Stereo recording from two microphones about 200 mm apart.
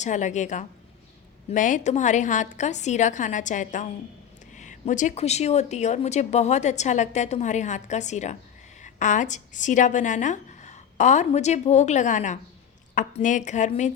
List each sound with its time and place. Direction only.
0.0 s a woman's voice: 35° left (ahead or behind)